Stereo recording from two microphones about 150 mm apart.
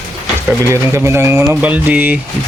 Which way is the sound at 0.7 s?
20° right (ahead or behind).